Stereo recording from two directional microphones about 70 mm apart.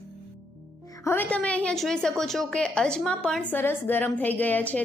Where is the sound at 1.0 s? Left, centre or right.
Left.